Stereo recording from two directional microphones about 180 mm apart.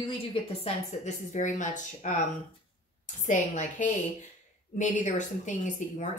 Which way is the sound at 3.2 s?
45° left (ahead or behind).